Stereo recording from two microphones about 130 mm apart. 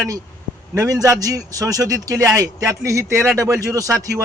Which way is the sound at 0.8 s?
25° right (ahead or behind).